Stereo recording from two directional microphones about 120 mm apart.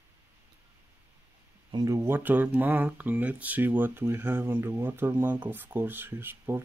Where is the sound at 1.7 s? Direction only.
25° right (ahead or behind).